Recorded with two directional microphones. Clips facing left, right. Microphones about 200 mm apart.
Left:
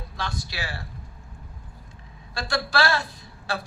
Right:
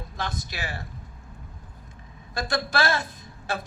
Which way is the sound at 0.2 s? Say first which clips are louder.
Even; 20° right (ahead or behind).